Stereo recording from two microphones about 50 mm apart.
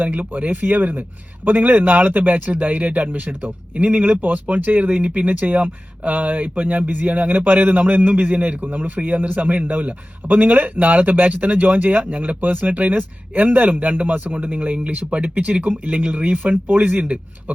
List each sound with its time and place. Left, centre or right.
0.0 s speech: right